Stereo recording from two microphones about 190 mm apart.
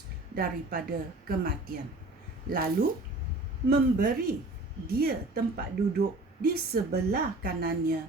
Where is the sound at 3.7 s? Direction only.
50° right (ahead or behind).